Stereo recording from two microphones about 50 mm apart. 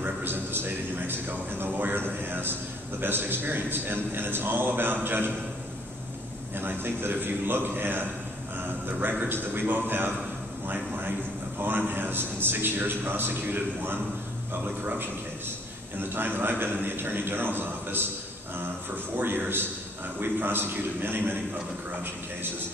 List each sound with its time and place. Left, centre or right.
0.0 s a man's voice: right
6.5 s a man's voice: right
16.0 s a man's voice: right
19.1 s a man's voice: right